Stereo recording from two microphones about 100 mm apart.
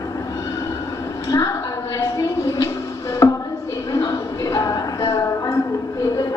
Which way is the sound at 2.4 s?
35° left (ahead or behind).